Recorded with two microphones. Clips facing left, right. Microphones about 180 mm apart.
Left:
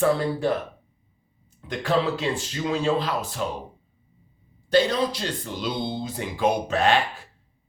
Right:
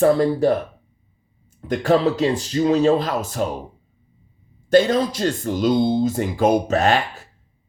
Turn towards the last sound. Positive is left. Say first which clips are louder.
# right 3 dB
turn(degrees=-45)  # may be behind; listen again after turning